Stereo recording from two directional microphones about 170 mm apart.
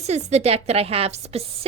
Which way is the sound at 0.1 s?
40° right (ahead or behind).